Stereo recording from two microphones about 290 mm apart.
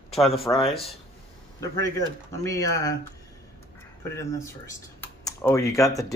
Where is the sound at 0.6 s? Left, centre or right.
Centre.